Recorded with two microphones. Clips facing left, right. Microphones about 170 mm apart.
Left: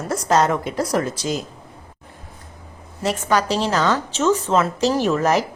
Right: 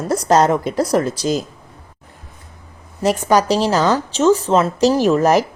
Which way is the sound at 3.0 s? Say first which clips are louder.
Right 5 dB; 40° right (ahead or behind).